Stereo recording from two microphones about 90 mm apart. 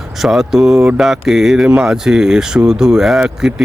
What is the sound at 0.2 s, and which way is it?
Speech, 5° right (ahead or behind).